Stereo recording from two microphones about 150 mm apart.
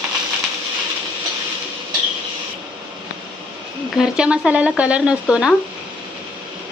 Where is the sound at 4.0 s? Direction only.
5° right (ahead or behind).